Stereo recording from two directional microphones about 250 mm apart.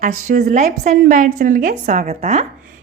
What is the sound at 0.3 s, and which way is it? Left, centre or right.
A woman's voice, right.